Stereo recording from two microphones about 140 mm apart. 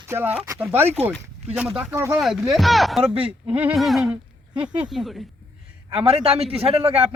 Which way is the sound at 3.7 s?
Centre (ahead or behind).